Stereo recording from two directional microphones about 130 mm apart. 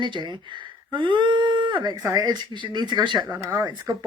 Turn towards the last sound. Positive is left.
turn(degrees=-15)  # may be behind; listen again after turning